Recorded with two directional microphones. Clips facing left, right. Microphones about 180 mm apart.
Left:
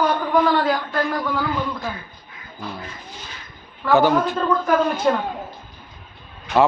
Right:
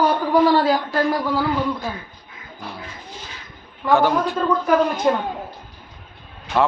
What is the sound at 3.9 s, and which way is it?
Speech, centre (ahead or behind).